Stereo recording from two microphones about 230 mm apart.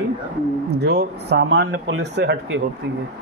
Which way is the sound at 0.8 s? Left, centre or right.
Right.